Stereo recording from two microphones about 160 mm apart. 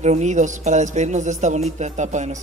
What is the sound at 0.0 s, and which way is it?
A man's voice, 45° right (ahead or behind).